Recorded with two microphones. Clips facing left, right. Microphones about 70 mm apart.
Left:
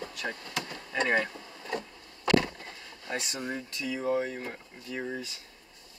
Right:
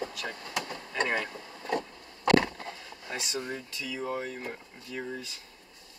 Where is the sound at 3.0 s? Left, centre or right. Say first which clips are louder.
Left 1 dB; centre.